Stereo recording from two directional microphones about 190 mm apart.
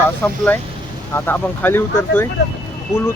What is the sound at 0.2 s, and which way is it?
Speech, 10° left (ahead or behind).